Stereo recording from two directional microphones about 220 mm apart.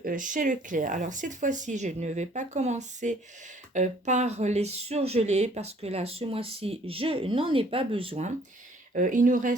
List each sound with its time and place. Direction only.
0.0 s speech: 35° right (ahead or behind)